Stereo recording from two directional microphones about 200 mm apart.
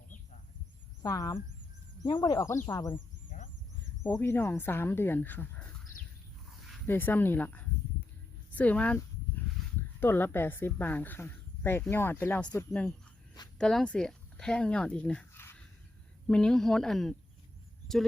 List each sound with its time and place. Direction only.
1.0 s a woman's voice: 15° left (ahead or behind)
3.2 s a sound: 40° left (ahead or behind)
4.0 s a woman's voice: 10° left (ahead or behind)
6.8 s speech: 10° left (ahead or behind)
8.5 s a sound: 5° left (ahead or behind)
10.0 s a woman's voice: 10° left (ahead or behind)